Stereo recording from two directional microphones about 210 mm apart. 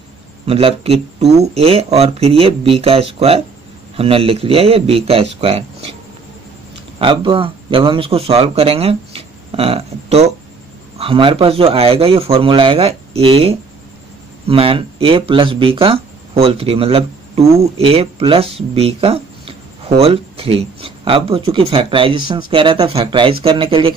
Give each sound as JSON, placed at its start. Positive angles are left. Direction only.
{"t": 0.5, "sound": "speech", "side_deg": -25}
{"t": 7.0, "sound": "speech", "side_deg": -25}